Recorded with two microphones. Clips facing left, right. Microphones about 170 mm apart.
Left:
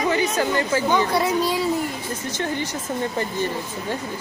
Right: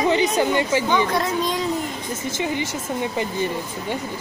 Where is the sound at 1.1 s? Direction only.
10° left (ahead or behind).